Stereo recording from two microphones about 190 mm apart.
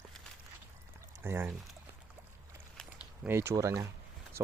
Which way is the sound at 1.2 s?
10° right (ahead or behind).